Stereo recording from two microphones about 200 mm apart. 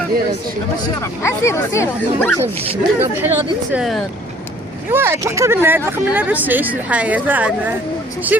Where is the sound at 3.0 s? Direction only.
10° right (ahead or behind).